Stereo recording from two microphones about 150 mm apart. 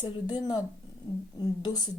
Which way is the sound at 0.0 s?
30° left (ahead or behind).